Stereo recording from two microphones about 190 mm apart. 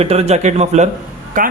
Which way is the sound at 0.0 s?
35° right (ahead or behind).